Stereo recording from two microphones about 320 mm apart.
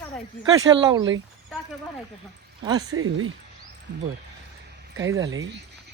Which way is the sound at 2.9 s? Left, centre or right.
Right.